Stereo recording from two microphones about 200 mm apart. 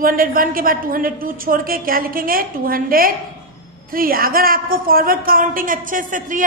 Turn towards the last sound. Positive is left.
turn(degrees=-40)  # may be behind; listen again after turning